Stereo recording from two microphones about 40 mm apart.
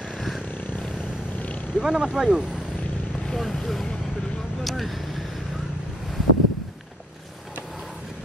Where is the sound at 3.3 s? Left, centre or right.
Centre.